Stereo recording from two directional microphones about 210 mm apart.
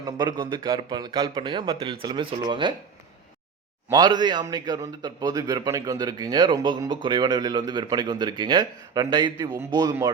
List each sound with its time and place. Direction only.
0.0 s a man's voice: 20° right (ahead or behind)
3.8 s a man's voice: 20° right (ahead or behind)